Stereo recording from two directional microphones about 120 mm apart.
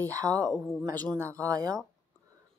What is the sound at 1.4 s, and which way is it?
Speech, 30° right (ahead or behind).